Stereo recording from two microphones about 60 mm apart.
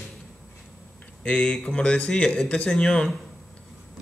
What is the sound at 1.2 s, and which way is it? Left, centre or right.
A man's voice, centre.